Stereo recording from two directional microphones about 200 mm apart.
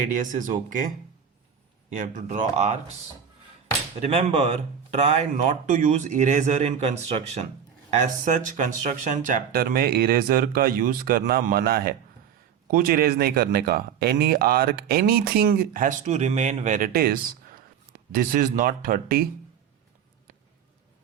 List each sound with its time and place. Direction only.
0.0 s speech: 40° right (ahead or behind)
1.9 s speech: 40° right (ahead or behind)
4.0 s speech: 30° right (ahead or behind); by 19.3 s 45° right (ahead or behind)